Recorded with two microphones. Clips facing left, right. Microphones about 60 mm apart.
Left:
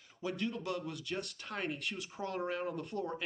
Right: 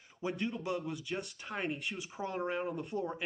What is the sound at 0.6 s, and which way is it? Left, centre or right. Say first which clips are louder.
Speech: right 2 dB; centre.